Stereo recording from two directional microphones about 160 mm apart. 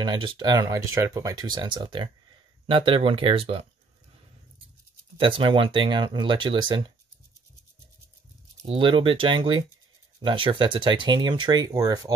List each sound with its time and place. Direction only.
0.0 s speech: 30° right (ahead or behind)
5.2 s speech: 30° right (ahead or behind)
8.6 s speech: 30° right (ahead or behind)